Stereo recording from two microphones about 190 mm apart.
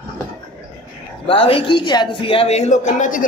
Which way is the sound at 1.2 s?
30° left (ahead or behind).